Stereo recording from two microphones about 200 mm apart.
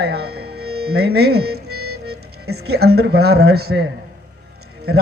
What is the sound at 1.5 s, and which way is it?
Music, 90° right.